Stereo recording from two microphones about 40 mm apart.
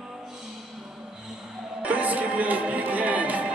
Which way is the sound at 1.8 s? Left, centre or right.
Right.